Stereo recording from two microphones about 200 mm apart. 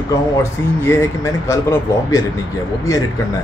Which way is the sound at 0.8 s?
15° left (ahead or behind).